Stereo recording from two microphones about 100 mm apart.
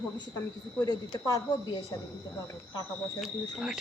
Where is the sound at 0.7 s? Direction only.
40° left (ahead or behind).